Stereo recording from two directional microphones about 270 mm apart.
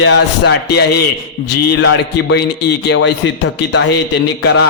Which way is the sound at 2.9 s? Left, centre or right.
Left.